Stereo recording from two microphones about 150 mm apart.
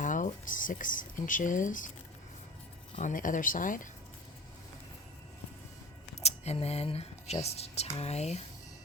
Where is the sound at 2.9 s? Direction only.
60° left (ahead or behind).